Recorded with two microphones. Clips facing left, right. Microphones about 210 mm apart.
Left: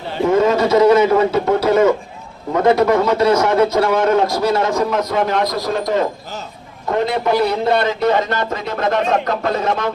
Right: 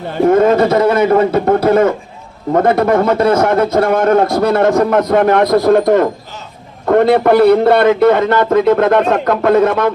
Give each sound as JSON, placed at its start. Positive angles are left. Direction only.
{"t": 0.1, "sound": "a man's voice", "side_deg": -55}